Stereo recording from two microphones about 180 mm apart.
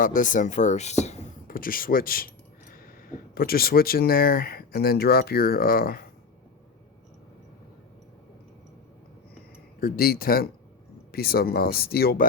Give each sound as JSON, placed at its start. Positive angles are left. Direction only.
{"t": 0.0, "sound": "speech", "side_deg": 45}
{"t": 9.8, "sound": "speech", "side_deg": 55}